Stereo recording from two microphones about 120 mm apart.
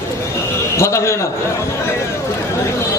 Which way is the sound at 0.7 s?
25° left (ahead or behind).